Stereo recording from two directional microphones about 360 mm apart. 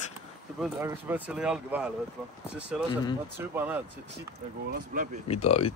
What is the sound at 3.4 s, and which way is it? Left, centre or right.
Speech, centre.